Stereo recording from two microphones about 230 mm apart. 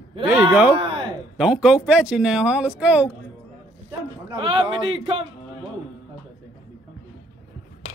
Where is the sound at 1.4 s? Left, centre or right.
Centre.